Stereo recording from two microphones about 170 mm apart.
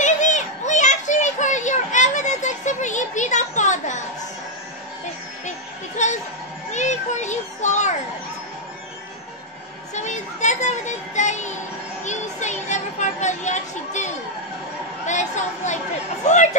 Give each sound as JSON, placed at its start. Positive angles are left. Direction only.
{"t": 0.0, "sound": "children playing", "side_deg": 45}
{"t": 6.0, "sound": "music", "side_deg": 45}
{"t": 6.7, "sound": "children playing", "side_deg": 45}
{"t": 9.9, "sound": "music", "side_deg": 45}
{"t": 12.0, "sound": "a sound", "side_deg": 45}
{"t": 15.0, "sound": "chatter", "side_deg": 45}
{"t": 16.3, "sound": "speech", "side_deg": 45}